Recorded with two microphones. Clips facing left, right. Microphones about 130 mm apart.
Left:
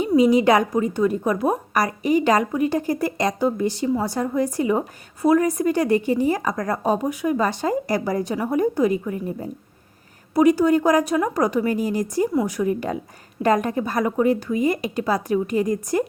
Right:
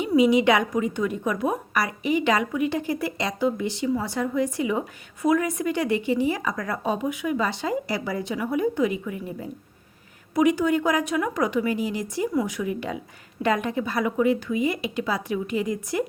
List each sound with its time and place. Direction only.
0.2 s a woman's voice: 40° left (ahead or behind)